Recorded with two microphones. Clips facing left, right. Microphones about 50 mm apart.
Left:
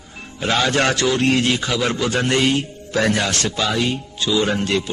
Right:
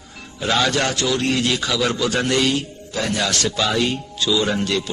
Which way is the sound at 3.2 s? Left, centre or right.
Left.